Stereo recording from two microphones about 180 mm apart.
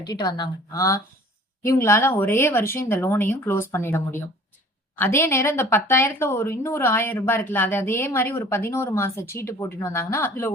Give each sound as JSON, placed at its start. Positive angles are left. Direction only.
{"t": 0.0, "sound": "speech", "side_deg": 20}